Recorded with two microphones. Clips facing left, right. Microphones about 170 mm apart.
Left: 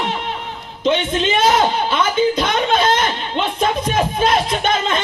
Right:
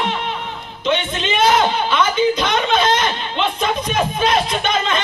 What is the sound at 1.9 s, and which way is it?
Speech, 50° left (ahead or behind).